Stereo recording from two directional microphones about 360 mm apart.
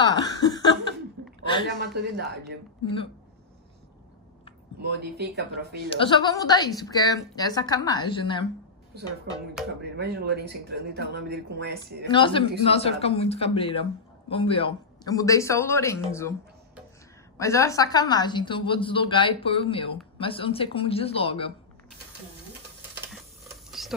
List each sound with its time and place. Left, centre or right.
0.1 s chuckle: centre
1.8 s speech: right
4.7 s speech: right
5.9 s a woman's voice: centre
9.6 s speech: centre
9.9 s speech: right
12.1 s a woman's voice: centre
17.4 s a woman's voice: centre